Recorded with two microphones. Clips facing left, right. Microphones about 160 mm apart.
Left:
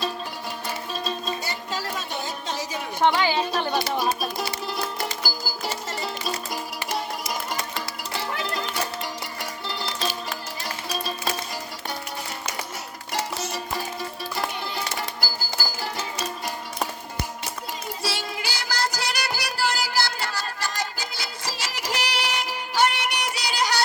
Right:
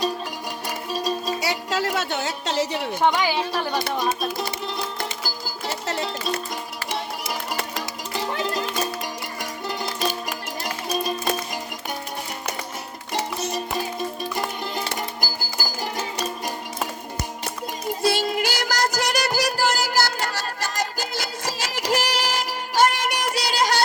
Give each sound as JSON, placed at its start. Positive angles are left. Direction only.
{"t": 0.9, "sound": "music", "side_deg": -10}
{"t": 1.4, "sound": "a sound", "side_deg": -85}
{"t": 3.2, "sound": "speech", "side_deg": -10}
{"t": 3.9, "sound": "speech", "side_deg": 5}
{"t": 5.2, "sound": "music", "side_deg": 0}
{"t": 8.3, "sound": "music", "side_deg": -20}
{"t": 13.1, "sound": "music", "side_deg": -20}
{"t": 18.0, "sound": "music", "side_deg": -55}